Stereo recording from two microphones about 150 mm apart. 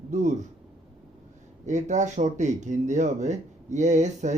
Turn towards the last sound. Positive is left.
turn(degrees=-50)  # may be behind; listen again after turning